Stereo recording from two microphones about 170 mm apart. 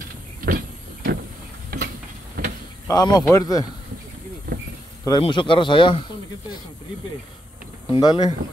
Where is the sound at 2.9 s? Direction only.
20° left (ahead or behind).